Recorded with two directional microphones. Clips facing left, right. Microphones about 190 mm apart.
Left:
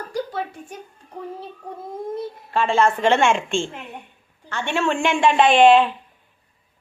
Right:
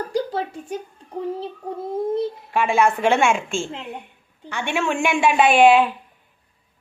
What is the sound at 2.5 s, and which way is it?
A woman's voice, 10° right (ahead or behind).